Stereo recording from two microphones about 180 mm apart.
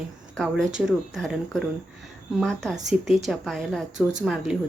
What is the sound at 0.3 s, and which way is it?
Speech, centre (ahead or behind).